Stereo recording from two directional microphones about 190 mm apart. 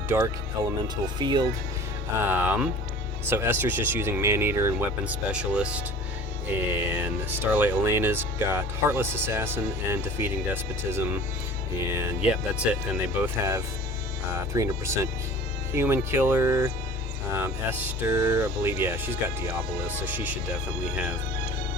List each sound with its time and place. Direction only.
1.2 s speech: 25° right (ahead or behind)
2.2 s speech: 10° right (ahead or behind)
13.2 s speech: 15° right (ahead or behind)